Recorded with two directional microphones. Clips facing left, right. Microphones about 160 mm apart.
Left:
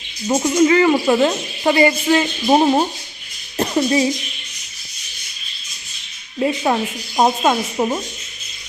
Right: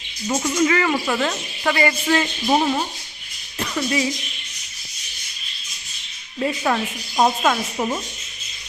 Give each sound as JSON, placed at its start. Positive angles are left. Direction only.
{"t": 0.3, "sound": "speech", "side_deg": 25}
{"t": 2.6, "sound": "speech", "side_deg": 30}
{"t": 6.4, "sound": "speech", "side_deg": 20}